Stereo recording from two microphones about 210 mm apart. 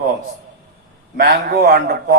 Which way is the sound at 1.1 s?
45° right (ahead or behind).